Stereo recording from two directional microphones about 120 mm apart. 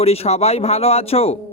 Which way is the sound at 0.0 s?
60° left (ahead or behind).